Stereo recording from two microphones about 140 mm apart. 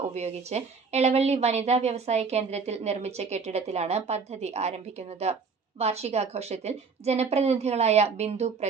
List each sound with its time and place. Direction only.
0.1 s a woman's voice: 50° right (ahead or behind)